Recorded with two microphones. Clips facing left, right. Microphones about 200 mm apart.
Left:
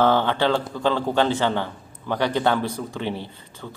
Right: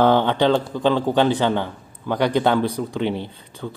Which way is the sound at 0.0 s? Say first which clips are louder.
Right 3 dB; 15° right (ahead or behind).